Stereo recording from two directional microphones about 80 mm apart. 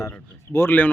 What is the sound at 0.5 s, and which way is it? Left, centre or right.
Speech, left.